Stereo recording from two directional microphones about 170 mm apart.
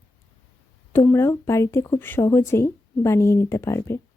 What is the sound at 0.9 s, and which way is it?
Speech, 15° left (ahead or behind).